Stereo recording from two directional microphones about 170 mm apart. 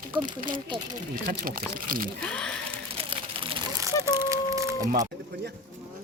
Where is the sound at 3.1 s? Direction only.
30° right (ahead or behind).